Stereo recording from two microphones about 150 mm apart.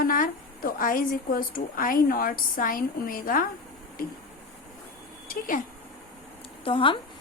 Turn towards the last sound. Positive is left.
turn(degrees=35)  # may be behind; listen again after turning